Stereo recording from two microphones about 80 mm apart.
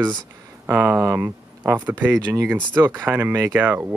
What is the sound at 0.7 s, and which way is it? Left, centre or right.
Speech, right.